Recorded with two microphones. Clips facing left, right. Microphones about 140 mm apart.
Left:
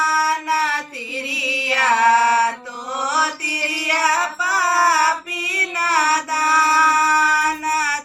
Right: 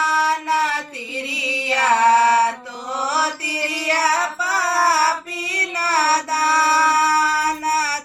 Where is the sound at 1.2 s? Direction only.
25° right (ahead or behind).